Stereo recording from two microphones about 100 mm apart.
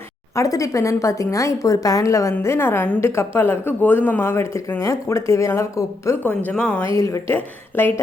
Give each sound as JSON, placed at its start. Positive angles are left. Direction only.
{"t": 0.3, "sound": "a woman's voice", "side_deg": 35}
{"t": 6.5, "sound": "speech", "side_deg": 10}
{"t": 6.9, "sound": "a woman's voice", "side_deg": 30}
{"t": 7.3, "sound": "speech", "side_deg": 20}